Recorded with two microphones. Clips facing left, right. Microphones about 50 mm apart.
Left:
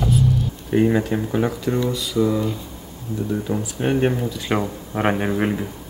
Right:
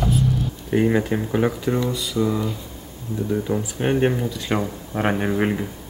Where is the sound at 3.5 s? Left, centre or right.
Centre.